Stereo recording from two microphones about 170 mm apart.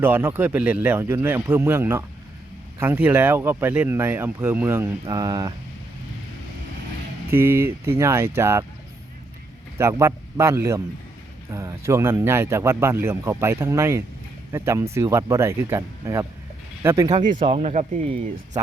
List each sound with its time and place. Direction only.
0.0 s speech: 10° right (ahead or behind)
7.3 s speech: 15° right (ahead or behind)
9.7 s speech: 15° right (ahead or behind)
17.4 s speech: 35° right (ahead or behind)